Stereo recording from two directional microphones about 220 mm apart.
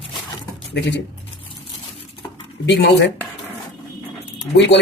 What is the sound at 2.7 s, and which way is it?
Speech, 55° left (ahead or behind).